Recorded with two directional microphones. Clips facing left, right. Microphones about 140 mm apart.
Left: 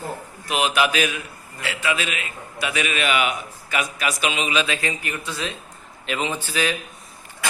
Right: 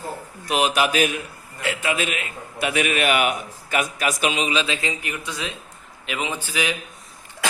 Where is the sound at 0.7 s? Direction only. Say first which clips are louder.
Left 1 dB; 40° right (ahead or behind); by 6.7 s 15° right (ahead or behind).